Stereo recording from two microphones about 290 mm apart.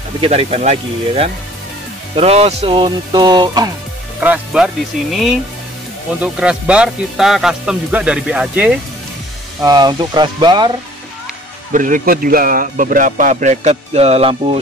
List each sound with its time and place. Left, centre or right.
0.2 s a man's voice: right; by 4.6 s centre
6.2 s speech: centre
11.7 s a man's voice: right